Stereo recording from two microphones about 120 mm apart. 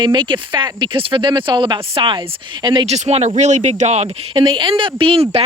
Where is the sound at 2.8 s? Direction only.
65° right (ahead or behind).